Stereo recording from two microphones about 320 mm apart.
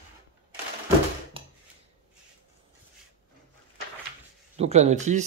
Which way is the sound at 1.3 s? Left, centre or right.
Centre.